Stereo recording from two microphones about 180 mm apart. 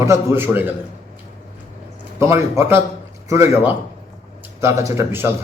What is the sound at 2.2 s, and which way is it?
A man's voice, 15° right (ahead or behind).